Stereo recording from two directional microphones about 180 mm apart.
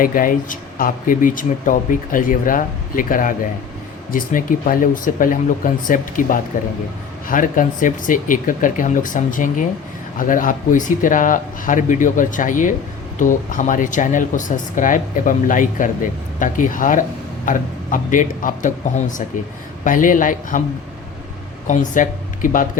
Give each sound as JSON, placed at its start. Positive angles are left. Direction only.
{"t": 0.0, "sound": "speech", "side_deg": 50}
{"t": 21.7, "sound": "speech", "side_deg": 45}